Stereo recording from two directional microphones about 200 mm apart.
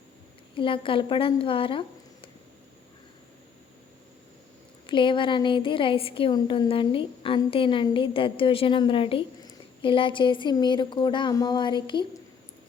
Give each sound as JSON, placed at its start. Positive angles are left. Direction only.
{"t": 0.5, "sound": "a woman's voice", "side_deg": 25}
{"t": 4.9, "sound": "a woman's voice", "side_deg": 25}